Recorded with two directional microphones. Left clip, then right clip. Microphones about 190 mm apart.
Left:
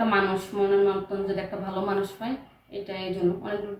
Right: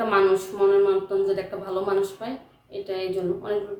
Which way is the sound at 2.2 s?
20° right (ahead or behind).